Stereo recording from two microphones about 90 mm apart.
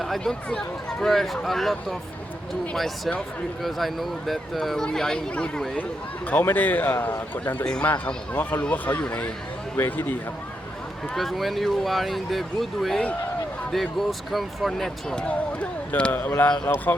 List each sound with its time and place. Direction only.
0.0 s a man's voice: 5° left (ahead or behind); by 7.5 s 20° left (ahead or behind)
7.6 s a man's voice: 10° left (ahead or behind)
11.1 s speech: centre (ahead or behind)
15.9 s a man's voice: 15° left (ahead or behind)